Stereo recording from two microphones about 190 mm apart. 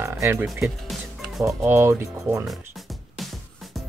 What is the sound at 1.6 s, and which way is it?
Speech, 15° right (ahead or behind).